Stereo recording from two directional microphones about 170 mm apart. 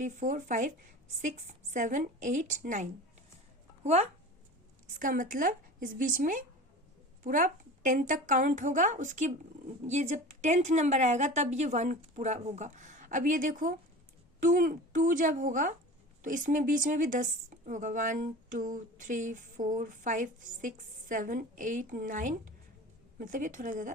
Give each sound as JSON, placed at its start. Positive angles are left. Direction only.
{"t": 0.0, "sound": "a woman's voice", "side_deg": -45}
{"t": 4.9, "sound": "a woman's voice", "side_deg": -55}